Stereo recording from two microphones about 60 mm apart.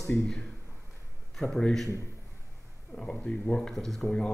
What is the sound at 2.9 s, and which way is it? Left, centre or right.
Speech, centre.